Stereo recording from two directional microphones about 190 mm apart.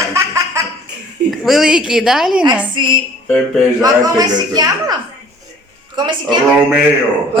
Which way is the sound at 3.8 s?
20° right (ahead or behind).